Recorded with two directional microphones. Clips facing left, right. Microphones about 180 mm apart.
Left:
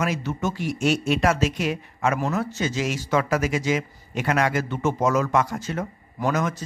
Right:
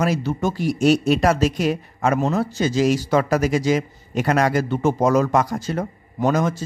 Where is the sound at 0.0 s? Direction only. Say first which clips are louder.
Right 4 dB; 35° right (ahead or behind).